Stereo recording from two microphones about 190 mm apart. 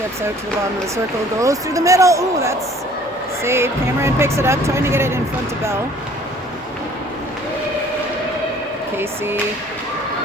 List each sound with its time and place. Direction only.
1.4 s speech: 15° right (ahead or behind)
9.0 s speech: 10° right (ahead or behind)